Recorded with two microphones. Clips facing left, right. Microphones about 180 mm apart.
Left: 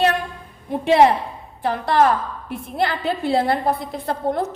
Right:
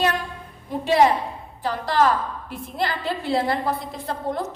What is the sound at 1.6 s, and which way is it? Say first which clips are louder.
A woman's voice: left 3 dB; 55° left (ahead or behind).